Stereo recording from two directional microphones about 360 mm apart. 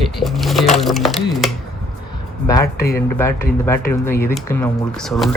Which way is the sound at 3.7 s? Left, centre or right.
Centre.